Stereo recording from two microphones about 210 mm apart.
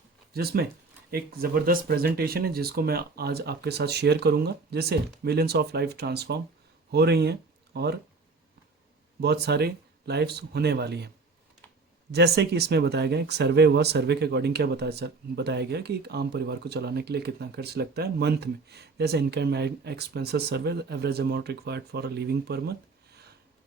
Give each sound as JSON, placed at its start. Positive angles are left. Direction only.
{"t": 0.3, "sound": "speech", "side_deg": -50}
{"t": 9.2, "sound": "speech", "side_deg": -50}
{"t": 12.1, "sound": "speech", "side_deg": -50}